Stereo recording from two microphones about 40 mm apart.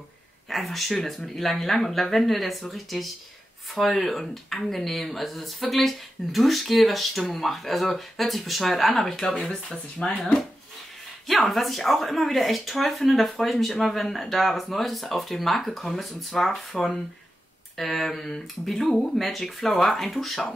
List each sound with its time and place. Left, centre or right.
0.5 s speech: centre
9.5 s speech: centre
11.2 s speech: centre